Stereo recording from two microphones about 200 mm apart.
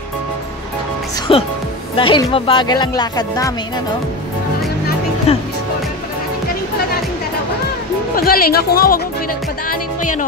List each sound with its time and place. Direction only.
1.3 s speech: 30° left (ahead or behind)
5.3 s speech: 30° left (ahead or behind)
8.2 s speech: 50° left (ahead or behind)